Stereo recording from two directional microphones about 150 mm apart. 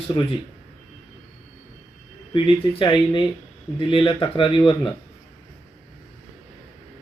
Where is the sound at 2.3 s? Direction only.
35° left (ahead or behind).